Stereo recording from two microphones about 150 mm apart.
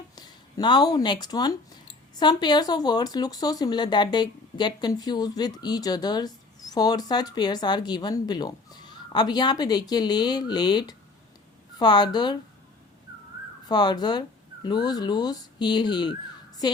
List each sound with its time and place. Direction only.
0.2 s speech: 30° left (ahead or behind)
13.7 s speech: 25° left (ahead or behind)